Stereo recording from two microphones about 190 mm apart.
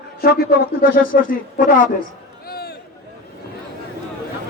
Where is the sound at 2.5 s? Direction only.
55° left (ahead or behind).